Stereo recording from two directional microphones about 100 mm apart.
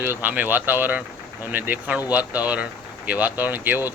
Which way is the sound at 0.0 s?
20° right (ahead or behind).